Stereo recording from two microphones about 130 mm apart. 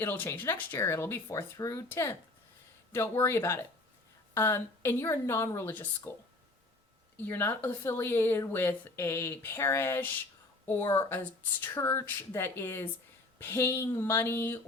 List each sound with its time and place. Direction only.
0.0 s speech: 15° left (ahead or behind)
7.2 s speech: 15° left (ahead or behind)